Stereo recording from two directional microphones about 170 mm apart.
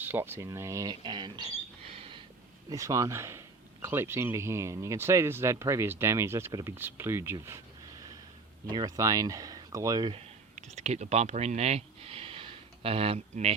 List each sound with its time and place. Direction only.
0.0 s speech: 10° right (ahead or behind)
1.9 s a sound: 35° right (ahead or behind)
2.6 s speech: 20° right (ahead or behind)
8.7 s speech: 20° right (ahead or behind)
10.8 s speech: 40° right (ahead or behind)